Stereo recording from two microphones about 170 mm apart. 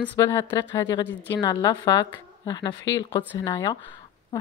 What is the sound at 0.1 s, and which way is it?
Speech, 15° left (ahead or behind).